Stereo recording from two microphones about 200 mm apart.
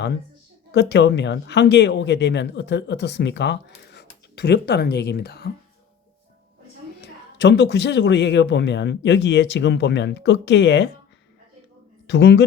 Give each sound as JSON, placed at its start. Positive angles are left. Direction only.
{"t": 0.7, "sound": "speech", "side_deg": 60}
{"t": 7.0, "sound": "speech", "side_deg": 60}
{"t": 12.0, "sound": "speech", "side_deg": 65}